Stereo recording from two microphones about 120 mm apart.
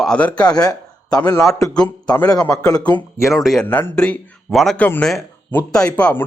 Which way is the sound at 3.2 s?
Centre (ahead or behind).